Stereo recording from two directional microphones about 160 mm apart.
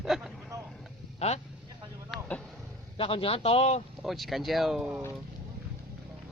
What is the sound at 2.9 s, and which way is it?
Speech, 35° left (ahead or behind).